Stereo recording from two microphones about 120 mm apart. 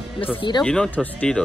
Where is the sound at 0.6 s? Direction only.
10° left (ahead or behind).